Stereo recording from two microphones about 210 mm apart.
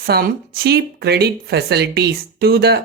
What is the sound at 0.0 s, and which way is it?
Speech, 45° right (ahead or behind).